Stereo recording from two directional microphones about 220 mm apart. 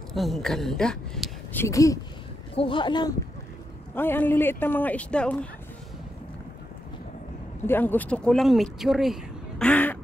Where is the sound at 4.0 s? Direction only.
10° left (ahead or behind).